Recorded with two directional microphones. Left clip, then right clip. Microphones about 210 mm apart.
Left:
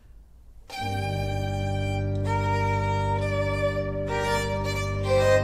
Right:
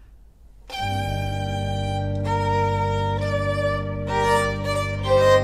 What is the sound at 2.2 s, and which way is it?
Music, 25° right (ahead or behind).